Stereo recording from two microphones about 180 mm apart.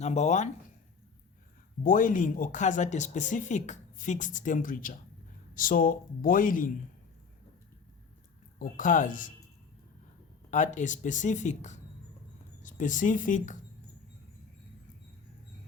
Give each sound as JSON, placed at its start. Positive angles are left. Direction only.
{"t": 0.0, "sound": "speech", "side_deg": 40}
{"t": 1.8, "sound": "speech", "side_deg": 50}
{"t": 8.5, "sound": "speech", "side_deg": 45}
{"t": 10.5, "sound": "speech", "side_deg": 45}